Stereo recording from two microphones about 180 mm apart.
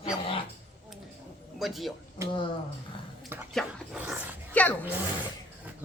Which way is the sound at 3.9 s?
10° right (ahead or behind).